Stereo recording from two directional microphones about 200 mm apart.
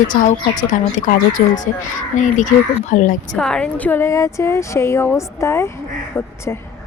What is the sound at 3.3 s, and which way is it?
Speech, 5° left (ahead or behind).